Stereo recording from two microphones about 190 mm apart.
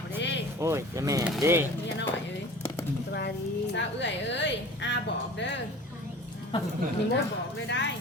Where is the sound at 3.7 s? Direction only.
70° left (ahead or behind).